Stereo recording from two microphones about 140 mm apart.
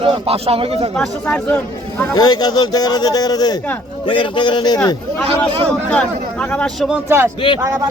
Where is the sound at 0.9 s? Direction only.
5° left (ahead or behind).